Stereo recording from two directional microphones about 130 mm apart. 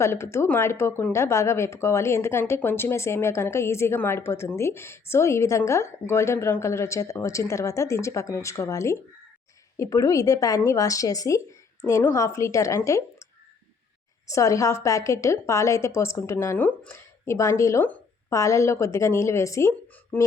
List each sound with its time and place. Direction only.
0.0 s speech: 20° left (ahead or behind)
14.3 s speech: 25° left (ahead or behind)
20.1 s a sound: 15° left (ahead or behind)